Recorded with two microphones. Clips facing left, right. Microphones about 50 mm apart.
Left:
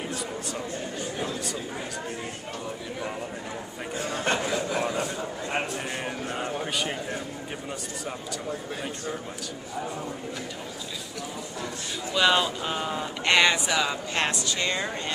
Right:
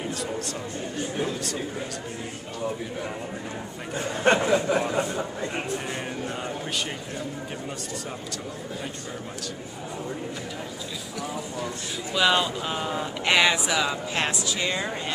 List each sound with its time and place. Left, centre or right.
3.9 s speech: right
6.0 s a man's voice: centre
12.1 s speech: centre